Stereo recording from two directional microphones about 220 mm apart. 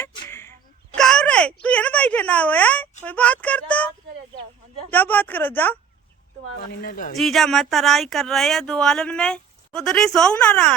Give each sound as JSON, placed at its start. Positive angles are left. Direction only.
{"t": 0.0, "sound": "a sound", "side_deg": 15}
{"t": 1.6, "sound": "bleat", "side_deg": 5}
{"t": 3.0, "sound": "speech", "side_deg": 5}
{"t": 6.7, "sound": "speech", "side_deg": 40}
{"t": 7.2, "sound": "speech", "side_deg": 0}